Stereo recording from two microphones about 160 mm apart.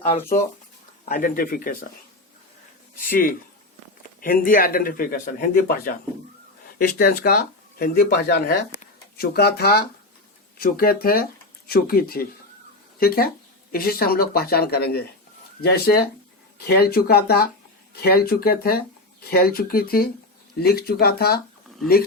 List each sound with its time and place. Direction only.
0.0 s speech: 40° left (ahead or behind)
1.0 s speech: 60° left (ahead or behind)
3.1 s speech: 65° left (ahead or behind)
6.7 s speech: 75° left (ahead or behind)
10.6 s speech: 70° left (ahead or behind)